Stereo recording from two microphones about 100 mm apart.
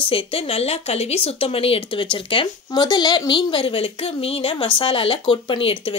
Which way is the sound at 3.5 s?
65° left (ahead or behind).